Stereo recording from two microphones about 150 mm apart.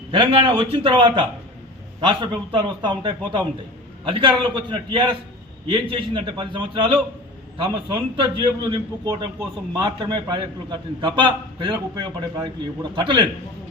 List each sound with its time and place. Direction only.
0.1 s a man's voice: 35° right (ahead or behind)